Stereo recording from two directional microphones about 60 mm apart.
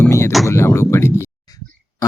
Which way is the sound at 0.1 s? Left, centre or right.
Left.